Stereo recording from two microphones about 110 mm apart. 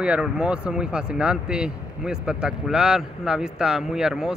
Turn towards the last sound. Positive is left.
turn(degrees=-5)  # may be behind; listen again after turning